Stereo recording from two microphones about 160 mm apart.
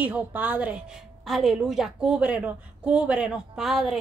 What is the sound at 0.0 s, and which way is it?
A woman's voice, 10° right (ahead or behind).